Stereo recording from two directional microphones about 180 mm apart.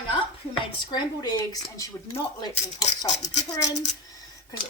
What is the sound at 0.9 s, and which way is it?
A woman's voice, 25° left (ahead or behind).